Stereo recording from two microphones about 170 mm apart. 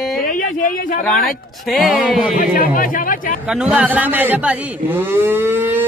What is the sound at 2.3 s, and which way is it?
Speech, 55° left (ahead or behind).